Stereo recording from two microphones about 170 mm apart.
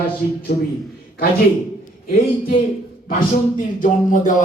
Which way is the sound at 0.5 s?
60° left (ahead or behind).